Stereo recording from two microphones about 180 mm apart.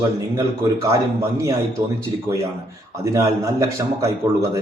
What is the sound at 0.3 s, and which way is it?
A man's voice, 15° right (ahead or behind).